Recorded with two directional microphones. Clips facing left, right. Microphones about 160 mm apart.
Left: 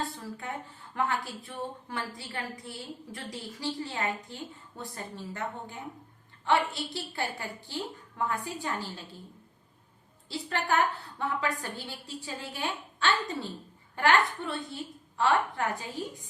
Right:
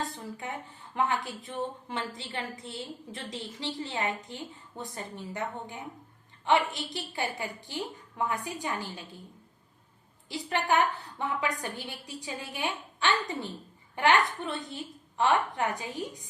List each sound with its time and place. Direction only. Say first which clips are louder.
0.3 s a woman's voice: even; 20° right (ahead or behind)
10.2 s a woman's voice: right 2 dB; 15° right (ahead or behind)